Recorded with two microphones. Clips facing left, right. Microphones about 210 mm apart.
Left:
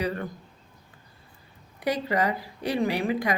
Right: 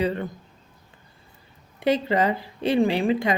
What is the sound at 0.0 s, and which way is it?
Speech, 25° right (ahead or behind).